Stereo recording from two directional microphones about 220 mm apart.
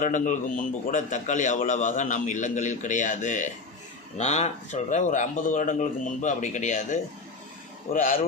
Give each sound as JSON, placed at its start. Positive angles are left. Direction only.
{"t": 0.0, "sound": "a man's voice", "side_deg": 35}